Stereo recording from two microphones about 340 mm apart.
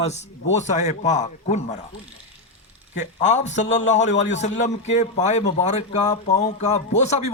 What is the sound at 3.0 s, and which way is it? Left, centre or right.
Speech, left.